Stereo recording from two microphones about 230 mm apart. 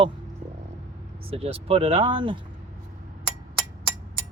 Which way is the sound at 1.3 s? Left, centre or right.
Right.